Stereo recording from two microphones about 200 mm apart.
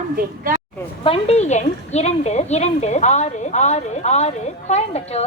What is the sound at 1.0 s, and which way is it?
A woman's voice, 30° left (ahead or behind).